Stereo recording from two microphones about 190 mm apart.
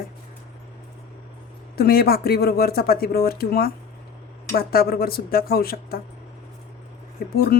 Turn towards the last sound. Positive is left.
turn(degrees=55)  # may be behind; listen again after turning